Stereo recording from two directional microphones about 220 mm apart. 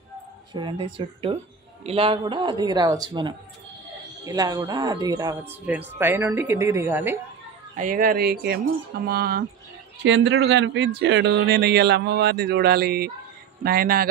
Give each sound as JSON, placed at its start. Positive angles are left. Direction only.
{"t": 0.5, "sound": "a woman's voice", "side_deg": -20}
{"t": 7.7, "sound": "speech", "side_deg": -40}
{"t": 10.0, "sound": "speech", "side_deg": -55}